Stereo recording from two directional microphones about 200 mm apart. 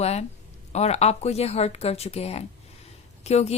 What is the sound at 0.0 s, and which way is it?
A woman's voice, 30° left (ahead or behind).